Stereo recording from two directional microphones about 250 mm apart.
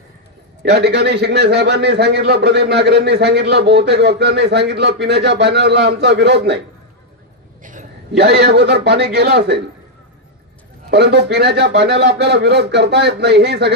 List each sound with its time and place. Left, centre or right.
0.6 s a man's voice: right
7.6 s a man's voice: right
10.9 s a man's voice: right